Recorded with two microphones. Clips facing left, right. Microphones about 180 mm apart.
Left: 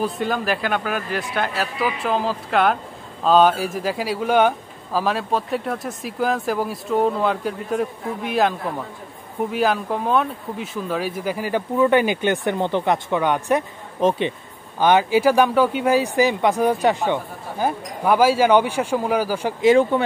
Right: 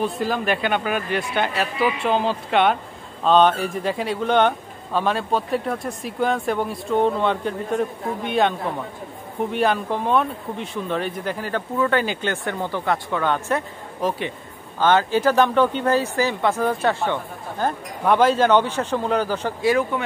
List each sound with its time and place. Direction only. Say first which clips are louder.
0.0 s speech: even; centre (ahead or behind)
19.6 s speech: left 6 dB; 25° left (ahead or behind)